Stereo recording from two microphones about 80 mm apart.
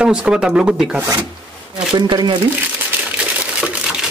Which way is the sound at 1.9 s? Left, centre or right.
Right.